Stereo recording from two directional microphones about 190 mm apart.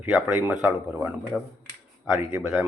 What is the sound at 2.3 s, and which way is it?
Speech, 5° right (ahead or behind).